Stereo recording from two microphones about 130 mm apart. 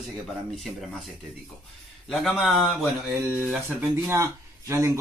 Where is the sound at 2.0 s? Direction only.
Centre (ahead or behind).